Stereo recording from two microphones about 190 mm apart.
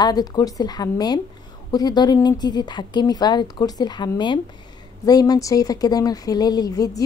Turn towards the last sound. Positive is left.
turn(degrees=20)  # may be behind; listen again after turning